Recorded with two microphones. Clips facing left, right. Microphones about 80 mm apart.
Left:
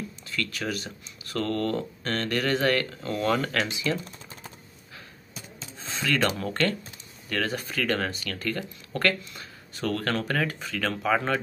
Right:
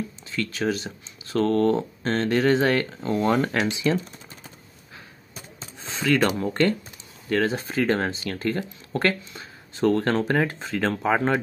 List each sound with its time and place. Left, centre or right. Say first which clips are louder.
0.3 s speech: right 5 dB; right
5.8 s speech: right 4 dB; centre